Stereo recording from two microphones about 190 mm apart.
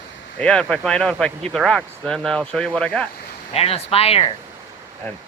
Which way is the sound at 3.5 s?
30° left (ahead or behind).